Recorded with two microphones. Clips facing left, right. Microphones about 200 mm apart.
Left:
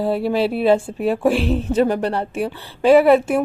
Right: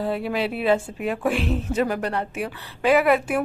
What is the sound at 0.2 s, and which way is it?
A woman's voice, 30° left (ahead or behind).